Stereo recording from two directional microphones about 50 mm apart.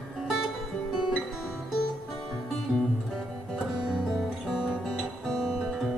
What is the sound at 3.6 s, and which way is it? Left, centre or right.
Music, centre.